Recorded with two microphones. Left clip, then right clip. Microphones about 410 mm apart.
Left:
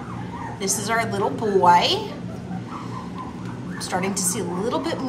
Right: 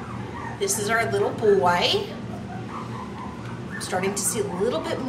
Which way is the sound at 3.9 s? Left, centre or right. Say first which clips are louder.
Left 1 dB; centre.